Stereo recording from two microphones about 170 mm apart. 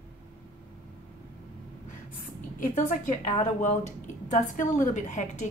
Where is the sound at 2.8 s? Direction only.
45° left (ahead or behind).